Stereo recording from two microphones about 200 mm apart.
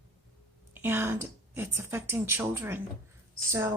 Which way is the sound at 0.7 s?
10° right (ahead or behind).